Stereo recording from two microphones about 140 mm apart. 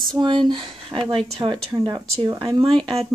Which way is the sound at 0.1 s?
35° right (ahead or behind).